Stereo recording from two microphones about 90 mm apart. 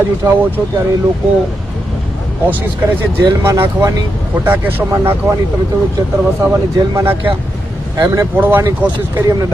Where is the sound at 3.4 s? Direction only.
30° right (ahead or behind).